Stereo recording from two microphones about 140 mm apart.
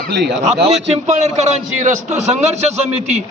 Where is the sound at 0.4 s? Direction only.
50° right (ahead or behind).